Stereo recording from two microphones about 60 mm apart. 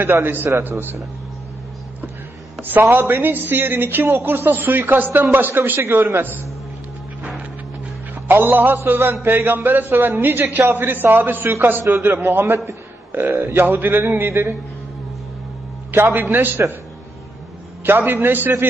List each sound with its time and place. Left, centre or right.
0.0 s a man's voice: right
2.6 s a man's voice: right
5.8 s a man's voice: right
8.1 s a man's voice: right
15.9 s a man's voice: right
17.8 s a man's voice: right